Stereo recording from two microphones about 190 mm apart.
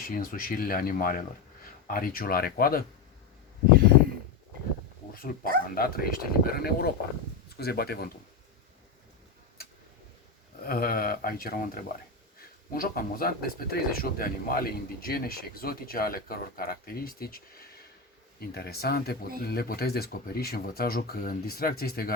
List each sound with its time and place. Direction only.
0.0 s speech: 50° left (ahead or behind)
5.1 s speech: 50° left (ahead or behind)
10.6 s speech: 50° left (ahead or behind)